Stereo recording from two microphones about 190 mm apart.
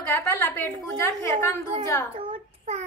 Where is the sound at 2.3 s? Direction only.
35° right (ahead or behind).